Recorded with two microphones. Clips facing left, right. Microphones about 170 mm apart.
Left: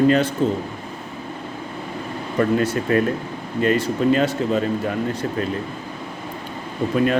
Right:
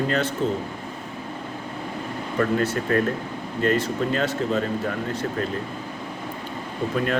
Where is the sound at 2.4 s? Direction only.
15° left (ahead or behind).